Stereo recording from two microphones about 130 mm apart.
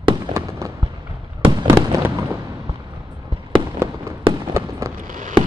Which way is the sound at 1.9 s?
20° right (ahead or behind).